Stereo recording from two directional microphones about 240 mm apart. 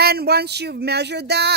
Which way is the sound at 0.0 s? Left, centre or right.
Right.